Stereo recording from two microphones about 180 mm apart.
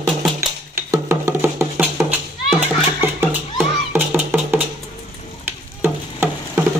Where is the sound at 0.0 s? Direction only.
5° right (ahead or behind).